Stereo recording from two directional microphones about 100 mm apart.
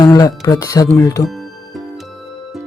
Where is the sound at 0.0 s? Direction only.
40° left (ahead or behind).